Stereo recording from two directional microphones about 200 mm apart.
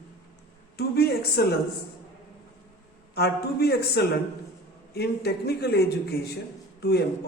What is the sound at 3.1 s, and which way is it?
A man's voice, 50° left (ahead or behind).